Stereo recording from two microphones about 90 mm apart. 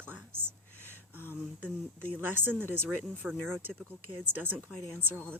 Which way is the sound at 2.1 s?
20° right (ahead or behind).